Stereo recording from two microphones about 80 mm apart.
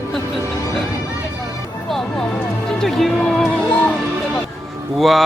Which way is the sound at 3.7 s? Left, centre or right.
Left.